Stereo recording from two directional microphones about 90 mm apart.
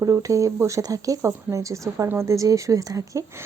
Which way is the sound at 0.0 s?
40° right (ahead or behind).